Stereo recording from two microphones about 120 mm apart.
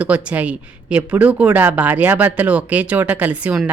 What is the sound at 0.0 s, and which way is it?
Speech, 10° right (ahead or behind).